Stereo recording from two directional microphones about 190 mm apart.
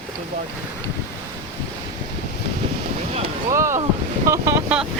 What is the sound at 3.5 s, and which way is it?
Speech, 15° right (ahead or behind).